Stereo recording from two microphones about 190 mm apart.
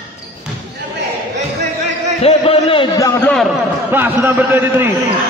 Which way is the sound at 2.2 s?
30° left (ahead or behind).